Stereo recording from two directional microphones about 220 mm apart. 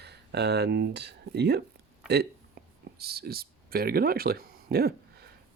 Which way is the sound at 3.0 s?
45° right (ahead or behind).